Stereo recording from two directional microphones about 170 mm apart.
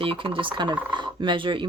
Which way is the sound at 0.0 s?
30° right (ahead or behind).